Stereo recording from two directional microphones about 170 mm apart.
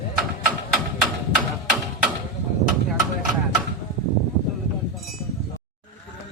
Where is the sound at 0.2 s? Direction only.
Centre (ahead or behind).